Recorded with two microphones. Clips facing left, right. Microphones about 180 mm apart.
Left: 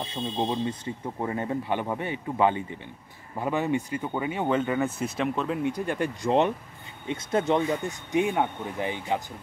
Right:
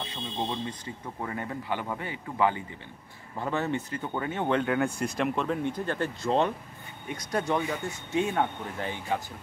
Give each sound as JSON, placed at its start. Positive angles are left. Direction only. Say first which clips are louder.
{"t": 0.0, "sound": "speech", "louder": "left 5 dB", "side_deg": 25}